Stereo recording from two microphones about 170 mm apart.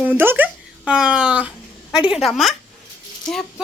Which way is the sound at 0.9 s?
5° right (ahead or behind).